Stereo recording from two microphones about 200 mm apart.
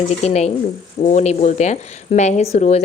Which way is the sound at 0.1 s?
30° left (ahead or behind).